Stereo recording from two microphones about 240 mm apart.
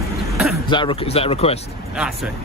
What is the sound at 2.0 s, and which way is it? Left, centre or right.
Speech, centre.